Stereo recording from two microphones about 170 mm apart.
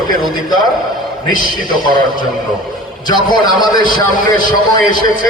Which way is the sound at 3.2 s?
25° left (ahead or behind).